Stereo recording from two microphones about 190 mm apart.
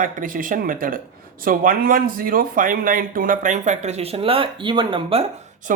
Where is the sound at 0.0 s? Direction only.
45° right (ahead or behind); by 5.2 s 30° right (ahead or behind).